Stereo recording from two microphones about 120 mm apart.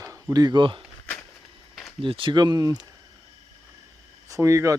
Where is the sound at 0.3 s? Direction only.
35° right (ahead or behind).